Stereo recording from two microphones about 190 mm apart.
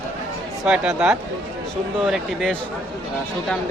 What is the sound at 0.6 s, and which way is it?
Speech, 5° right (ahead or behind).